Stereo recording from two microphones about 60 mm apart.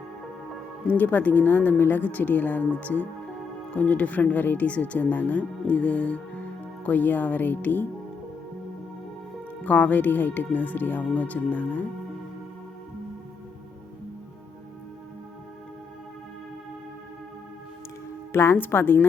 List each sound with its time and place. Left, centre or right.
0.9 s speech: left
9.6 s speech: left
18.3 s speech: left